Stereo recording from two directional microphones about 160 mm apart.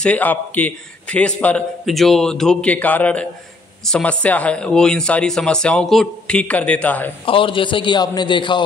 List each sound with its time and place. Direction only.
0.0 s a man's voice: 10° left (ahead or behind)
7.2 s a man's voice: 30° left (ahead or behind)